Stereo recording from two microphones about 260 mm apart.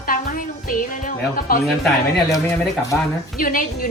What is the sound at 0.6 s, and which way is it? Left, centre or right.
Music, left.